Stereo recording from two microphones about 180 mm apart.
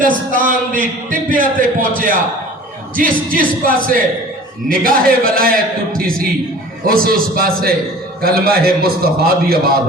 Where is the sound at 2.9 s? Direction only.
50° right (ahead or behind).